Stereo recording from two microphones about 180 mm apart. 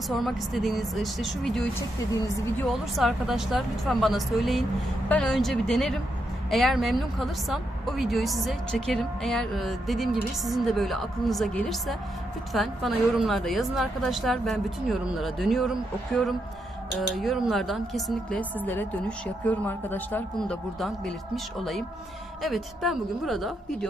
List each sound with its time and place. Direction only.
0.2 s a woman's voice: centre (ahead or behind)
2.2 s a woman's voice: 15° left (ahead or behind)
2.6 s a woman's voice: centre (ahead or behind)